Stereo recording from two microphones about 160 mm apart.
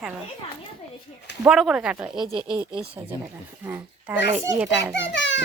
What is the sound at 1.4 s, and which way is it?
A woman's voice, 5° right (ahead or behind).